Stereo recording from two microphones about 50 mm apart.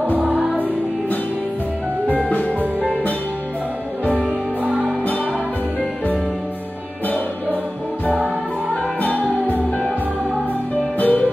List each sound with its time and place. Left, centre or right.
2.0 s music: left
4.6 s music: right
9.0 s music: left
11.0 s music: left